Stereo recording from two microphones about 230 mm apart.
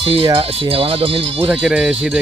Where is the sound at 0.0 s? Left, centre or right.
Right.